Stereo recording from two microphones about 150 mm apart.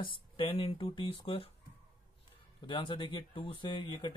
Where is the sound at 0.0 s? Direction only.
35° left (ahead or behind).